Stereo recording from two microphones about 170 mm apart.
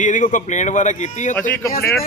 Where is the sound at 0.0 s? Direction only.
50° left (ahead or behind).